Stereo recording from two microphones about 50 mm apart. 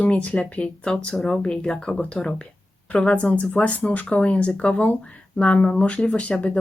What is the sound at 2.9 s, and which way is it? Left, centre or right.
Speech, left.